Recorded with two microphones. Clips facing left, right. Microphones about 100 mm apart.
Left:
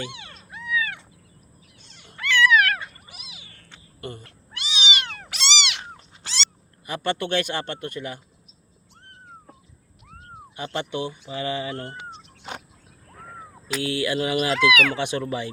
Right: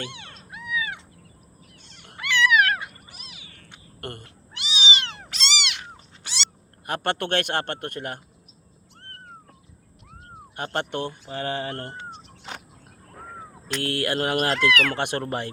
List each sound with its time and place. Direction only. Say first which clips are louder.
0.1 s cat: left 1 dB; 5° left (ahead or behind)
0.5 s cat: left 2 dB; 15° right (ahead or behind)
2.1 s cat: left 2 dB; 15° right (ahead or behind)
4.2 s cat: left 1 dB; 25° right (ahead or behind)
5.2 s cat: left 2 dB; centre (ahead or behind)
6.8 s a man's voice: even; 55° right (ahead or behind)
10.5 s speech: right 1 dB; 55° right (ahead or behind)
13.8 s speech: left 1 dB; 55° right (ahead or behind)
14.6 s speech: left 2 dB; 10° left (ahead or behind)
14.9 s speech: left 1 dB; 55° right (ahead or behind)